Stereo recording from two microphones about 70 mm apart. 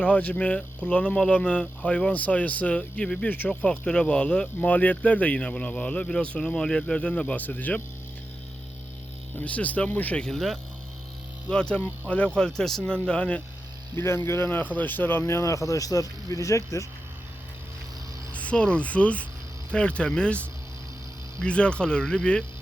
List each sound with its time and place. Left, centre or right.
0.0 s speech: centre
3.2 s speech: left
3.5 s speech: centre
9.4 s speech: left
10.2 s speech: centre
11.4 s speech: centre
12.4 s speech: centre
13.9 s speech: left
14.4 s speech: left
15.2 s speech: left
18.3 s speech: centre